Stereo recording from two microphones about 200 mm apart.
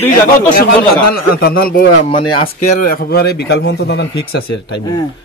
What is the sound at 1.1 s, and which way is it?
A man's voice, 50° left (ahead or behind).